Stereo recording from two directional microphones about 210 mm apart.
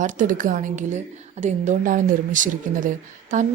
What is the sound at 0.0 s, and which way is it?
A woman's voice, 35° right (ahead or behind).